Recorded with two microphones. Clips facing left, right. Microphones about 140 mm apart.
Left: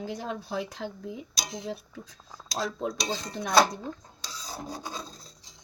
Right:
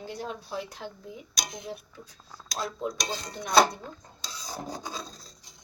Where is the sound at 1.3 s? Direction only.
30° left (ahead or behind).